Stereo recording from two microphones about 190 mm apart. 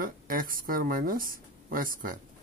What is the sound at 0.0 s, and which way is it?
Speech, 45° right (ahead or behind).